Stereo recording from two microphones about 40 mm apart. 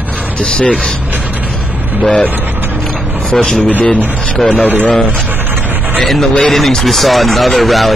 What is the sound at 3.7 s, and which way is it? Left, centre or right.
Speech, left.